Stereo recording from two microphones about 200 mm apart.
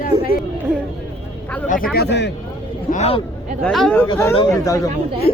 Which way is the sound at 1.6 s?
45° left (ahead or behind).